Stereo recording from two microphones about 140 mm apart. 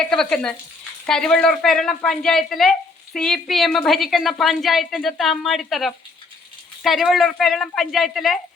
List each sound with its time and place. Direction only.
0.0 s speech: 5° left (ahead or behind)